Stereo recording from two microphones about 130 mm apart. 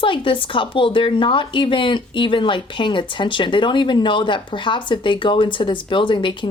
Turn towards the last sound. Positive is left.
turn(degrees=40)  # may be behind; listen again after turning